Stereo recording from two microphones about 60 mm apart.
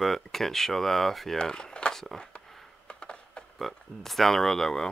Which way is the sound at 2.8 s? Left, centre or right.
Centre.